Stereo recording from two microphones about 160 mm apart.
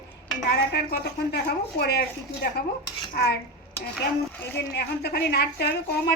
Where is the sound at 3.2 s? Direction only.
80° left.